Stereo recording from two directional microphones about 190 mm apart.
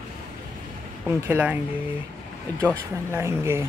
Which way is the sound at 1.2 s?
10° right (ahead or behind).